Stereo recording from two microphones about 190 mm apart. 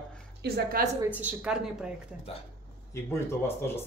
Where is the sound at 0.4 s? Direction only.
50° right (ahead or behind).